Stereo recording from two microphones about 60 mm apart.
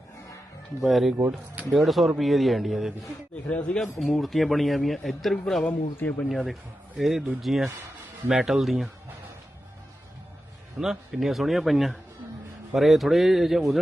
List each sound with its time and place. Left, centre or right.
0.8 s a man's voice: centre
3.5 s speech: centre
3.8 s a man's voice: centre
5.6 s speech: left
6.2 s a man's voice: centre
10.8 s a man's voice: centre